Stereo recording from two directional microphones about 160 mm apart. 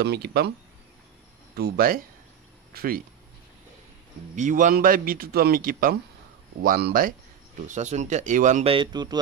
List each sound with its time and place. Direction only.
0.0 s speech: 90° right
1.6 s speech: 70° right (ahead or behind)
4.4 s speech: 55° right (ahead or behind)
7.6 s speech: 50° right (ahead or behind)
8.7 s a man's voice: 25° right (ahead or behind)